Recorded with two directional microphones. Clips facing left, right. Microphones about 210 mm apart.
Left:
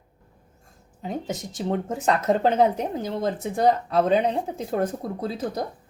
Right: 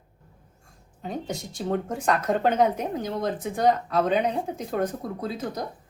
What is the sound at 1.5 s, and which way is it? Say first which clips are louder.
Speech: left 1 dB; 20° left (ahead or behind).